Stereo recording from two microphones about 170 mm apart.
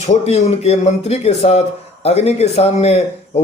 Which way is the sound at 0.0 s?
40° left (ahead or behind).